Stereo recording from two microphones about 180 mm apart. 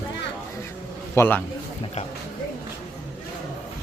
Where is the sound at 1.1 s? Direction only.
15° left (ahead or behind).